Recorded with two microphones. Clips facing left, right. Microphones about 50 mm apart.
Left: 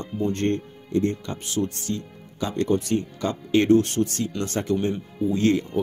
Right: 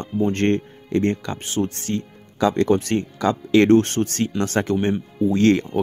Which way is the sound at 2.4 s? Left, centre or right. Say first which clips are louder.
Right 6 dB; right.